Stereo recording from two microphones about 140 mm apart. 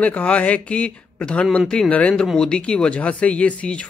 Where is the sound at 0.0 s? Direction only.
10° left (ahead or behind).